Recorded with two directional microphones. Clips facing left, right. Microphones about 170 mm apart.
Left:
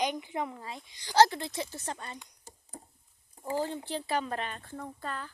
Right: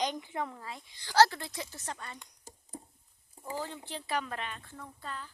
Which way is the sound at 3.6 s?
35° left (ahead or behind).